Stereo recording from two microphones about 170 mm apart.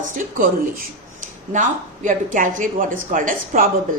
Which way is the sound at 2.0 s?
50° right (ahead or behind).